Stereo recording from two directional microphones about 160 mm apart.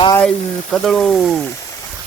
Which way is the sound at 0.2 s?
5° left (ahead or behind).